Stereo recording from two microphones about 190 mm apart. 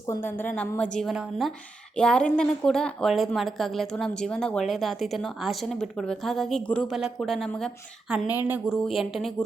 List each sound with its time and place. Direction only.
0.1 s a woman's voice: 10° left (ahead or behind)